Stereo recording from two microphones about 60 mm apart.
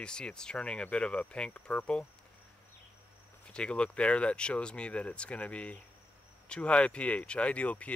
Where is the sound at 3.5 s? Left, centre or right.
Centre.